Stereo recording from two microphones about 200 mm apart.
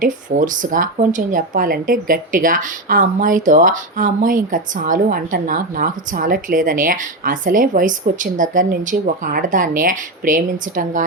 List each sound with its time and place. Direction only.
0.0 s speech: 40° right (ahead or behind)